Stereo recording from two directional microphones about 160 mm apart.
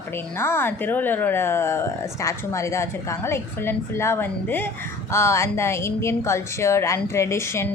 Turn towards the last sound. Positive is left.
turn(degrees=15)  # may be behind; listen again after turning